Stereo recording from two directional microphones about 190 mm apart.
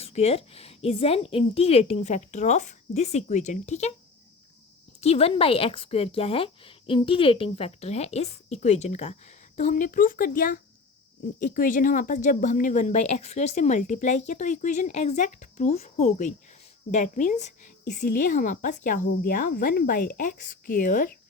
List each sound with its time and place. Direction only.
0.0 s a woman's voice: 35° left (ahead or behind)
4.9 s a woman's voice: 35° left (ahead or behind)